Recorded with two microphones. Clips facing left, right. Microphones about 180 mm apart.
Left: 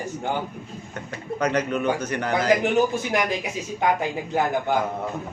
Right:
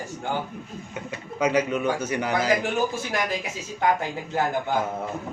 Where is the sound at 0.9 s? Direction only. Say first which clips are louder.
Left 1 dB; 10° right (ahead or behind).